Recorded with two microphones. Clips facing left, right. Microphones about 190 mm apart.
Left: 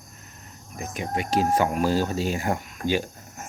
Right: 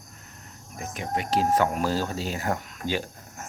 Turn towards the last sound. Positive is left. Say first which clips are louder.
# left 4 dB
turn(degrees=15)  # may be behind; listen again after turning